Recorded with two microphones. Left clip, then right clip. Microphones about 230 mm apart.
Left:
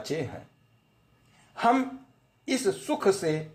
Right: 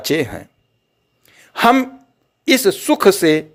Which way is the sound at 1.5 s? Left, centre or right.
Right.